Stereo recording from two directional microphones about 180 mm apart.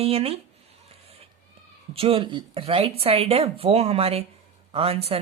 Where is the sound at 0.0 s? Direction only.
35° right (ahead or behind).